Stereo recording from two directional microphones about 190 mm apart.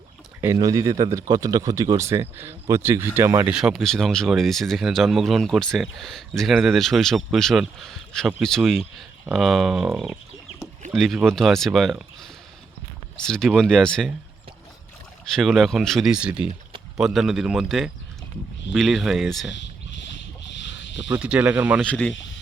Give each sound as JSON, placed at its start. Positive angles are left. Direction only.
{"t": 0.4, "sound": "a man's voice", "side_deg": -15}
{"t": 3.5, "sound": "speech", "side_deg": 0}
{"t": 15.2, "sound": "speech", "side_deg": 0}
{"t": 20.5, "sound": "a sound", "side_deg": 70}
{"t": 21.1, "sound": "speech", "side_deg": -5}
{"t": 21.8, "sound": "speech", "side_deg": 5}